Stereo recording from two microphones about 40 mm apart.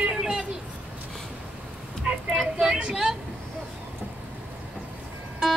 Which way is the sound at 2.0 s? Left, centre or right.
Centre.